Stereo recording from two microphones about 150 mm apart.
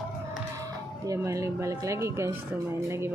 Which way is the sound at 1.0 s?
20° right (ahead or behind).